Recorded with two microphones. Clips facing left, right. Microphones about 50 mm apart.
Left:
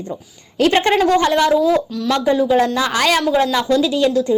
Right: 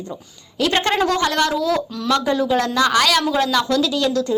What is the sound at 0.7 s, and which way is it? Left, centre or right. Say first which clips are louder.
Speech: left 3 dB; left.